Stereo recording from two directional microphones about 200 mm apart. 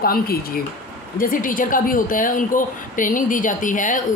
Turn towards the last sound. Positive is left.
turn(degrees=40)  # may be behind; listen again after turning